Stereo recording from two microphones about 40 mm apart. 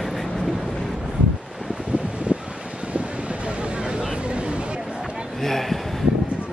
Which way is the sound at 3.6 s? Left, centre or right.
Right.